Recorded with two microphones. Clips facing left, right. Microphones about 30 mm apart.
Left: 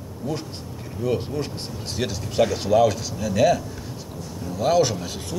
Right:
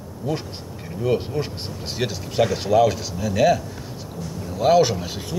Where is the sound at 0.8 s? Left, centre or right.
Centre.